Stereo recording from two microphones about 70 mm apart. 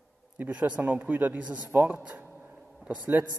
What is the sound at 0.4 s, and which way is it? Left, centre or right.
A man's voice, centre.